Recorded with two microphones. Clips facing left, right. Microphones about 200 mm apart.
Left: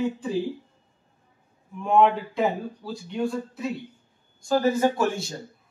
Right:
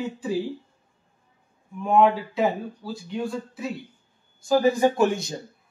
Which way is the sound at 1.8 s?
Centre (ahead or behind).